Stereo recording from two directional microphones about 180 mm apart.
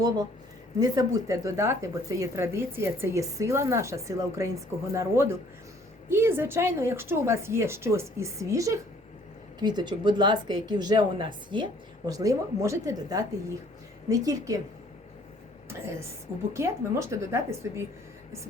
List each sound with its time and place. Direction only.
0.8 s speech: 20° right (ahead or behind)
16.5 s speech: 15° right (ahead or behind)